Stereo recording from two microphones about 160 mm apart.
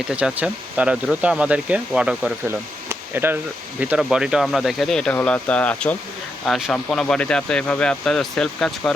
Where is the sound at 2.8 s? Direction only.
15° right (ahead or behind).